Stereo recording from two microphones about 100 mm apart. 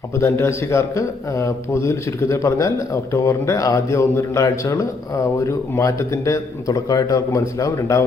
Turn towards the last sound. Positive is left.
turn(degrees=35)  # may be behind; listen again after turning